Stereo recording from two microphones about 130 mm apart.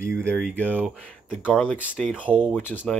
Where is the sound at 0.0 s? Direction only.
20° right (ahead or behind).